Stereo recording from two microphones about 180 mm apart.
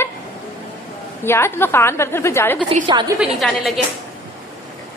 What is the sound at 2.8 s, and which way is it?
Speech, 25° right (ahead or behind).